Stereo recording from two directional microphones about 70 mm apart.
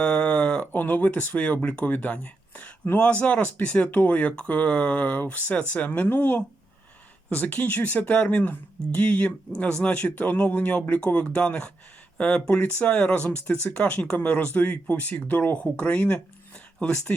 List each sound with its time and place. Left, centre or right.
0.0 s speech: centre